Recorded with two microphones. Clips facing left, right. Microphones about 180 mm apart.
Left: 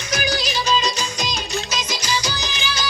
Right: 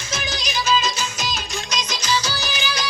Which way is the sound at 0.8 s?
15° left (ahead or behind).